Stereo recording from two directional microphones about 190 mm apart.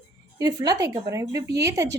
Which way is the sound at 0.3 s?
20° right (ahead or behind).